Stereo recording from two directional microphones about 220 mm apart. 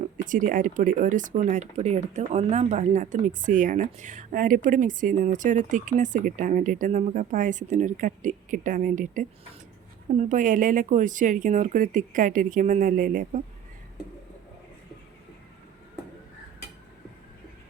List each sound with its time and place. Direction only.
0.3 s speech: 40° right (ahead or behind)